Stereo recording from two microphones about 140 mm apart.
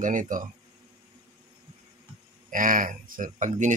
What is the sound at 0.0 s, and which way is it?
Speech, 70° right (ahead or behind).